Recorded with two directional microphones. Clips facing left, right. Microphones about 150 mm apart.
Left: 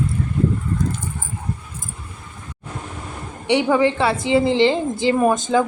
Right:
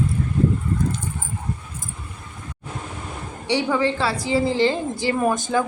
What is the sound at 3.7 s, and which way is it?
A woman's voice, 20° left (ahead or behind).